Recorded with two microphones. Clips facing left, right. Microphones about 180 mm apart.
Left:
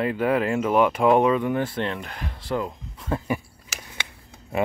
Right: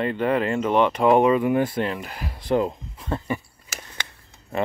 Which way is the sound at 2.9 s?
Centre (ahead or behind).